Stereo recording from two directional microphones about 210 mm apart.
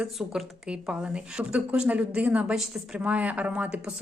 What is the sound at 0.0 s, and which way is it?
A woman's voice, centre (ahead or behind).